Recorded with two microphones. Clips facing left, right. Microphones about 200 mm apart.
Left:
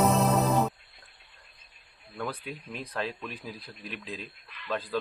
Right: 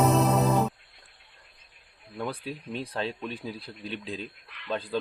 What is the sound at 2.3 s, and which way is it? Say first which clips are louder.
Speech: right 3 dB; 30° right (ahead or behind).